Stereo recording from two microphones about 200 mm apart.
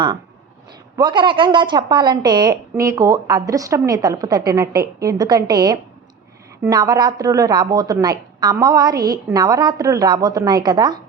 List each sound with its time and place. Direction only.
0.9 s a woman's voice: 25° right (ahead or behind)